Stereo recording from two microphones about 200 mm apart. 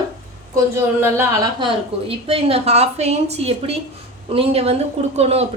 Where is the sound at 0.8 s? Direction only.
10° right (ahead or behind).